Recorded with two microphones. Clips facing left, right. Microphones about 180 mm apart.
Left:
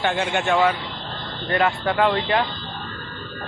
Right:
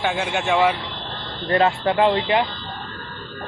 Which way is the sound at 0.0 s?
5° right (ahead or behind).